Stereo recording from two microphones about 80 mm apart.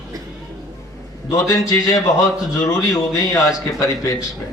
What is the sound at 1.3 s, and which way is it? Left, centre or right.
A man's voice, left.